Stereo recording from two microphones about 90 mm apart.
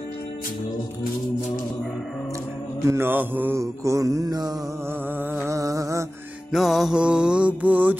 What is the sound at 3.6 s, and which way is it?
Mantra, 35° right (ahead or behind).